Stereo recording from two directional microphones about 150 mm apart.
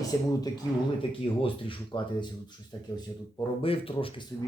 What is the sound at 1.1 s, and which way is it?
Speech, 35° left (ahead or behind).